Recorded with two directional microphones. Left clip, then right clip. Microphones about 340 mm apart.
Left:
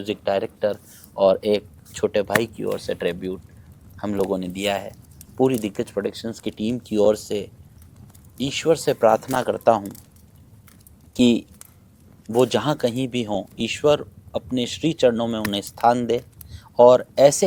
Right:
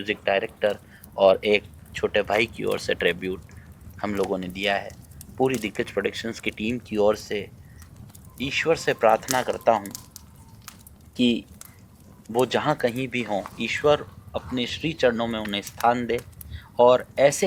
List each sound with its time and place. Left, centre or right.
0.1 s speech: left
11.1 s speech: left